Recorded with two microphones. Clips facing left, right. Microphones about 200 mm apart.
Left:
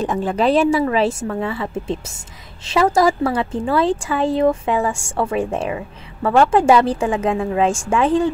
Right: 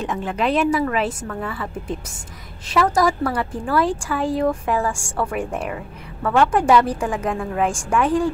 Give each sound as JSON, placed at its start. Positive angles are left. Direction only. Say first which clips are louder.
{"t": 0.0, "sound": "a woman's voice", "louder": "left 5 dB", "side_deg": 35}